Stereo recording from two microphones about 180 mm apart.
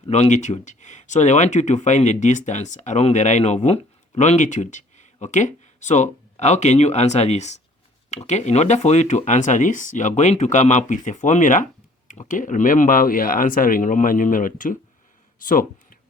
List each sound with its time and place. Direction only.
0.1 s speech: 40° left (ahead or behind)